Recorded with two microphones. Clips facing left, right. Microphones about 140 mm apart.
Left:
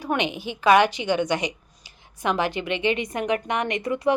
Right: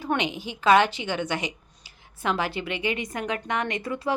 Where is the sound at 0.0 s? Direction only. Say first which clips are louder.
Left 2 dB; 15° left (ahead or behind).